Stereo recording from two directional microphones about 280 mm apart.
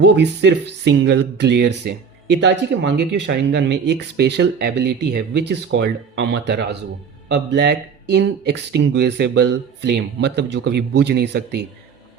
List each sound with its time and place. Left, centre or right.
0.0 s speech: right